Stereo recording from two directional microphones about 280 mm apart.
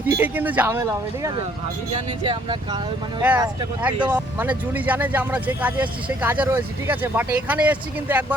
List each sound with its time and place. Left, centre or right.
0.1 s speech: centre
3.2 s speech: centre